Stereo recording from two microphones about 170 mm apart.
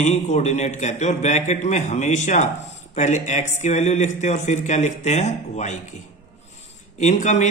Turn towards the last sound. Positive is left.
turn(degrees=45)  # may be behind; listen again after turning